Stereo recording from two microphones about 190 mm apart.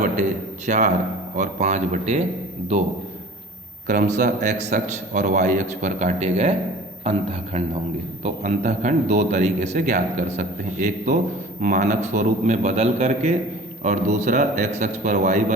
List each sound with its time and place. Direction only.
0.0 s a man's voice: 40° right (ahead or behind)
3.8 s a man's voice: 40° right (ahead or behind)